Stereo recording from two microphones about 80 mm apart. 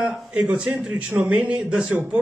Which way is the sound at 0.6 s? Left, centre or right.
Centre.